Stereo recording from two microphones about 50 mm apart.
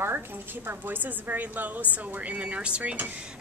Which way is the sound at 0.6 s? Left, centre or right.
Right.